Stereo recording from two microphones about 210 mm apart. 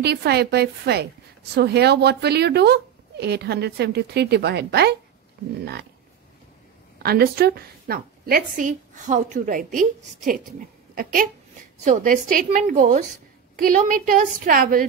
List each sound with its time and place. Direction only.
0.0 s a woman's voice: 50° right (ahead or behind)
7.0 s a woman's voice: 45° right (ahead or behind)
11.0 s a woman's voice: 40° right (ahead or behind)